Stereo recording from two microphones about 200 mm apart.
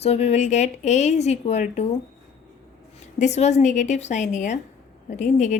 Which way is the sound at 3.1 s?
35° left (ahead or behind).